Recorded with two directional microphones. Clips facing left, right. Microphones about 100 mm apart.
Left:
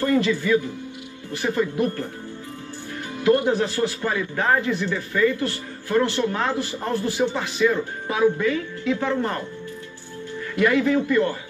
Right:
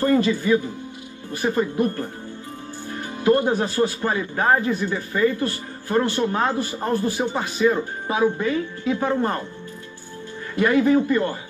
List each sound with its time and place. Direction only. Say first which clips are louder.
0.0 s a man's voice: right 2 dB; 35° right (ahead or behind)
1.5 s a man's voice: even; 35° right (ahead or behind)
2.9 s music: even; 30° right (ahead or behind)
3.7 s a man's voice: right 2 dB; 30° right (ahead or behind)
7.3 s speech: right 1 dB; 30° right (ahead or behind)
10.5 s a man's voice: right 2 dB; 30° right (ahead or behind)